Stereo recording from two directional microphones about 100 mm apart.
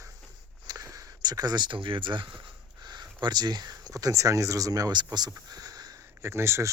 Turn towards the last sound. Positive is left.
turn(degrees=-25)  # may be behind; listen again after turning